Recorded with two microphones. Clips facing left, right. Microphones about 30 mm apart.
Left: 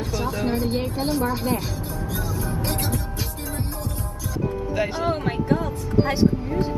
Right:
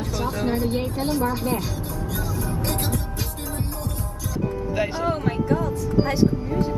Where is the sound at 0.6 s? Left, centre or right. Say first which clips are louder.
Even; left.